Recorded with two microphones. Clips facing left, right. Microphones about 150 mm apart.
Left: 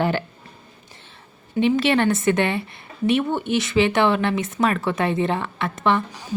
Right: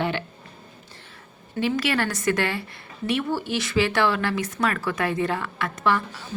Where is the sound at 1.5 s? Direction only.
25° left (ahead or behind).